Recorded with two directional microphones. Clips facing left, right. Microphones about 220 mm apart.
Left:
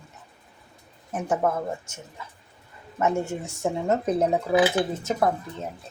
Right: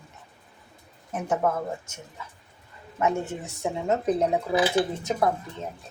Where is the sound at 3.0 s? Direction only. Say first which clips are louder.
Left 1 dB; centre (ahead or behind).